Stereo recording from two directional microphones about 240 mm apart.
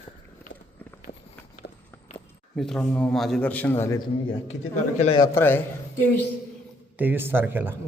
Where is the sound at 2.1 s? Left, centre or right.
Centre.